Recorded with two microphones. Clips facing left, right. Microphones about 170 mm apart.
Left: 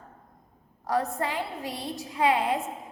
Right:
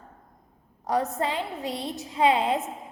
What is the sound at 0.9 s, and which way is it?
A woman's voice, 20° right (ahead or behind).